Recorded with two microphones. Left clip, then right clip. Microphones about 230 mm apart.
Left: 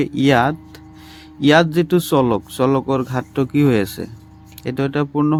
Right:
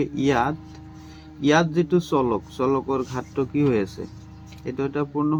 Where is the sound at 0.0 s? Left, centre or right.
Left.